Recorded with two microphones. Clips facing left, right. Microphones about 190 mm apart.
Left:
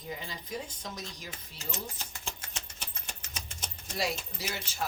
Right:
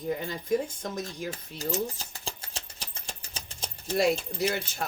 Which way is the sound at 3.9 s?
55° right (ahead or behind).